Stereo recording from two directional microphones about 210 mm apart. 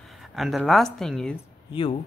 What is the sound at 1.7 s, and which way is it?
Speech, 25° left (ahead or behind).